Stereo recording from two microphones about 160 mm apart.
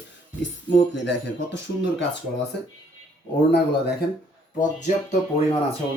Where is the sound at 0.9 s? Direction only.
90° left.